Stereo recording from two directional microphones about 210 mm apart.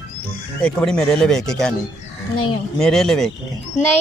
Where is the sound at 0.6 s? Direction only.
5° left (ahead or behind).